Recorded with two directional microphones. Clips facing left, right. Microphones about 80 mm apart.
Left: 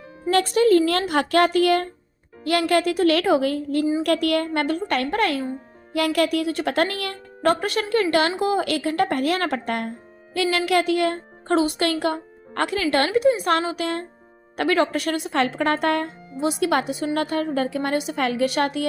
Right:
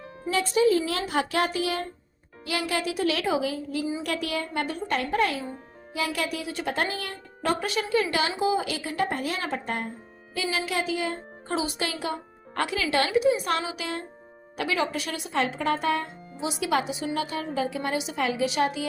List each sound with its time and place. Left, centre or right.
0.3 s speech: left